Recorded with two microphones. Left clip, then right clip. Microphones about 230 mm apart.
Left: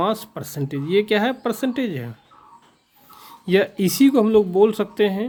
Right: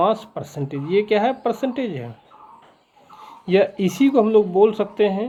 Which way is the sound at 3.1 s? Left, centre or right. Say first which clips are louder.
Right 1 dB; left.